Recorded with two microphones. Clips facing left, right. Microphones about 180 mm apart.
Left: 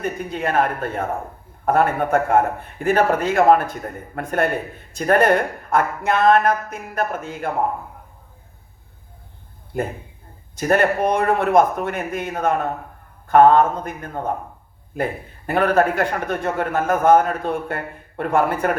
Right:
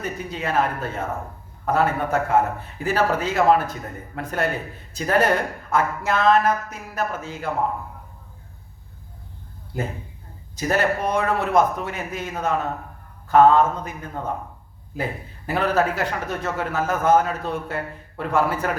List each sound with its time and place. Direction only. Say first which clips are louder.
0.0 s a man's voice: left 4 dB; 55° left (ahead or behind)
10.6 s a man's voice: left 4 dB; 55° left (ahead or behind)